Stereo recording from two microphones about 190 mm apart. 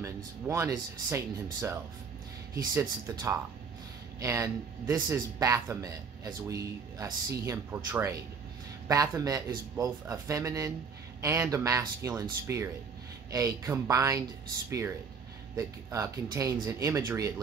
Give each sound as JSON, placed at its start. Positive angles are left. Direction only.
{"t": 0.0, "sound": "speech", "side_deg": -15}
{"t": 15.5, "sound": "speech", "side_deg": -15}